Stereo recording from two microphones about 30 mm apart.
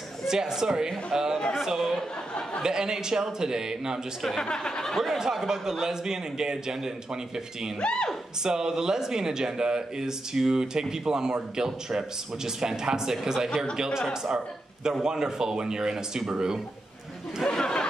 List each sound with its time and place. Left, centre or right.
0.3 s a man's voice: right
2.6 s speech: right
4.4 s speech: left
5.2 s speech: centre
7.8 s speech: left
8.5 s speech: right
17.5 s speech: left